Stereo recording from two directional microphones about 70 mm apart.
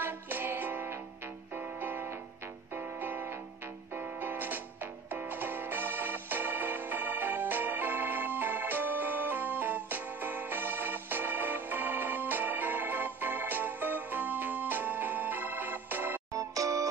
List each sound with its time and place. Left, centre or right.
0.0 s music: right
16.3 s music: right